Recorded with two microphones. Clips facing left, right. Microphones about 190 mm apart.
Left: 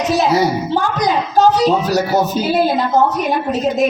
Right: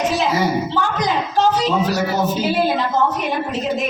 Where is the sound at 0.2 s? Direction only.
40° left (ahead or behind).